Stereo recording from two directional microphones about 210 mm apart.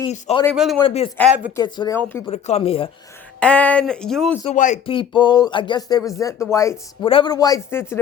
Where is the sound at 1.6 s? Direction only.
20° left (ahead or behind).